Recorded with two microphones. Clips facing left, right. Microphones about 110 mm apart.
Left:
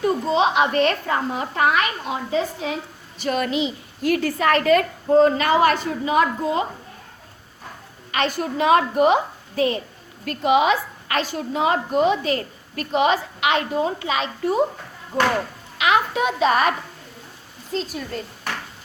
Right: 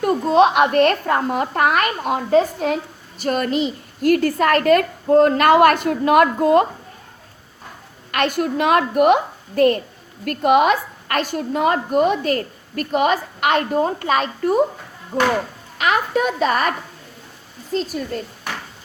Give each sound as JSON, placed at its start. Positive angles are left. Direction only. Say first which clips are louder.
{"t": 0.0, "sound": "a woman's voice", "louder": "right 5 dB", "side_deg": -60}
{"t": 8.1, "sound": "a woman's voice", "louder": "right 3 dB", "side_deg": -55}
{"t": 15.8, "sound": "a woman's voice", "louder": "right 1 dB", "side_deg": -45}
{"t": 17.7, "sound": "a woman's voice", "louder": "right 4 dB", "side_deg": -45}
{"t": 18.5, "sound": "a sound", "louder": "left 1 dB", "side_deg": 0}